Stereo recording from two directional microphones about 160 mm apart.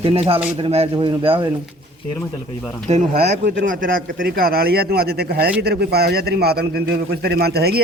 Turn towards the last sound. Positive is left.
turn(degrees=-85)